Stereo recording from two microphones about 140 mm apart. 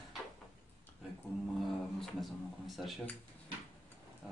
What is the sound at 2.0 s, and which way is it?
Speech, centre (ahead or behind).